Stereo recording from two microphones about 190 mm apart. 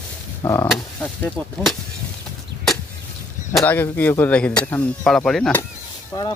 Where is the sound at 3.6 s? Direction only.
10° left (ahead or behind).